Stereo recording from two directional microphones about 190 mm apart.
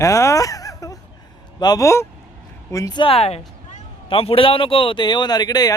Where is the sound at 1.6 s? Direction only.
20° left (ahead or behind).